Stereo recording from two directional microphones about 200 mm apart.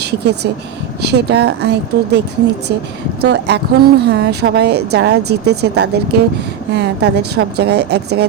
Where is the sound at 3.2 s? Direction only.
60° right (ahead or behind).